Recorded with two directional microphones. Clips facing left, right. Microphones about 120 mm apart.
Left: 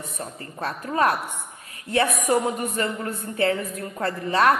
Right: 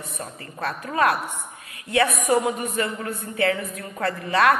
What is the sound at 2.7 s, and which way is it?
A woman's voice, 35° left (ahead or behind).